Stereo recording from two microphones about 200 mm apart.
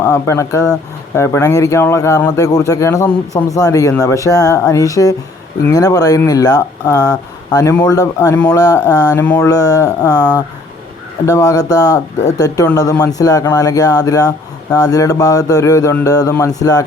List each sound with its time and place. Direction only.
0.0 s speech: 15° left (ahead or behind)